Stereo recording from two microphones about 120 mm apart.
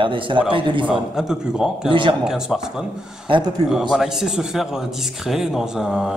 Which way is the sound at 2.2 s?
5° right (ahead or behind).